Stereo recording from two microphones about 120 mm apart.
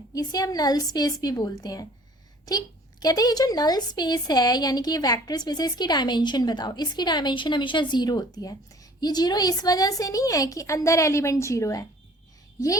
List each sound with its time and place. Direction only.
0.1 s a woman's voice: 30° left (ahead or behind)